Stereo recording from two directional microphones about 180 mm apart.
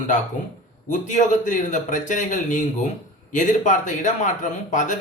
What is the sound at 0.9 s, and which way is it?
A man's voice, 45° left (ahead or behind).